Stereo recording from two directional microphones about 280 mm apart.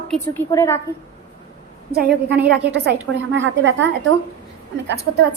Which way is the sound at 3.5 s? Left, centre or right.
Right.